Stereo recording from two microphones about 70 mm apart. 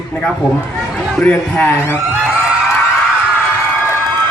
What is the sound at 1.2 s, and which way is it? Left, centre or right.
Speech, left.